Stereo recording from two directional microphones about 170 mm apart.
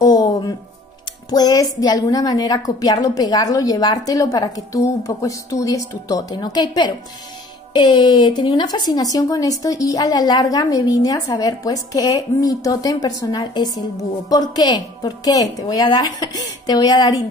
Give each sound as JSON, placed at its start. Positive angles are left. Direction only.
{"t": 0.0, "sound": "music", "side_deg": 20}
{"t": 1.3, "sound": "speech", "side_deg": 20}